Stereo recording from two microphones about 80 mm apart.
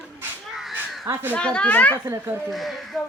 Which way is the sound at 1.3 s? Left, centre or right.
Centre.